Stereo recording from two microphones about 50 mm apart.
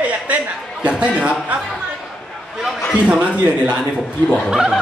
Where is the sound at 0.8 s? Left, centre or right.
Right.